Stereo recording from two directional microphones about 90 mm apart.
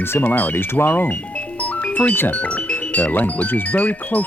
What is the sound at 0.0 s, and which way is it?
Speech, 25° left (ahead or behind).